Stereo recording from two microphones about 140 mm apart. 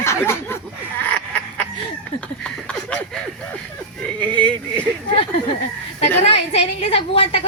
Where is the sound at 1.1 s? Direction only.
10° left (ahead or behind).